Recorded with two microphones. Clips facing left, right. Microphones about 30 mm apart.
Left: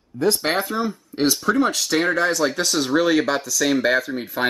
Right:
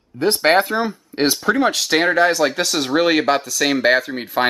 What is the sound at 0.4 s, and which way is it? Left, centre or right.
Speech, right.